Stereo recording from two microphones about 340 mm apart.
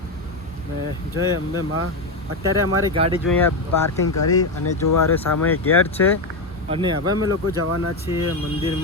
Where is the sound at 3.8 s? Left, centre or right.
Left.